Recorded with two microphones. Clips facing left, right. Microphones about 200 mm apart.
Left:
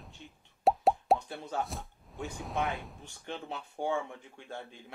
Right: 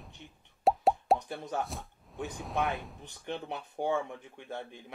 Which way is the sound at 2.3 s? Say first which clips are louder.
Right 1 dB; centre (ahead or behind).